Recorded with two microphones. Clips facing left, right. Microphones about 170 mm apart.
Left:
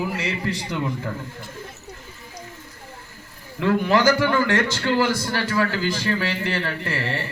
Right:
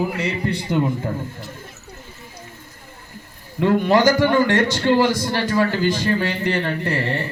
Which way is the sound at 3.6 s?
35° right (ahead or behind).